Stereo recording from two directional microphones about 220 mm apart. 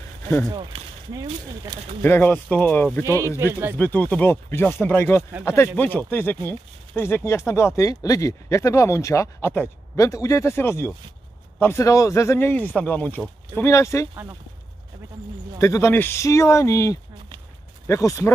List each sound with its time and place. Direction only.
0.5 s speech: 25° right (ahead or behind)
2.0 s speech: 10° left (ahead or behind)
3.3 s speech: 10° right (ahead or behind)
3.7 s speech: 5° left (ahead or behind)
15.6 s speech: 10° left (ahead or behind)